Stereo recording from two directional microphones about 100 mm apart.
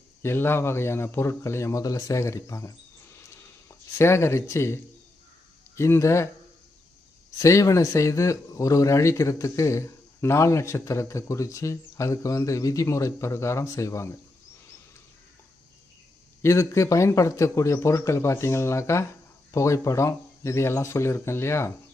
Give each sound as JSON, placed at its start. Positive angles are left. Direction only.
{"t": 0.2, "sound": "a man's voice", "side_deg": 25}
{"t": 7.3, "sound": "speech", "side_deg": 35}
{"t": 16.4, "sound": "a man's voice", "side_deg": 30}